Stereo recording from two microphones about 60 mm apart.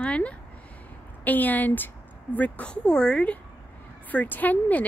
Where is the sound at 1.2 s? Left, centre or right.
Left.